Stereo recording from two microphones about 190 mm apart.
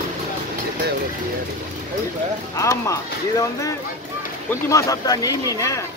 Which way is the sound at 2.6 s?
15° left (ahead or behind).